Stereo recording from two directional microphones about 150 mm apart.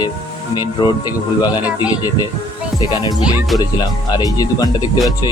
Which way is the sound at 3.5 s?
25° left (ahead or behind).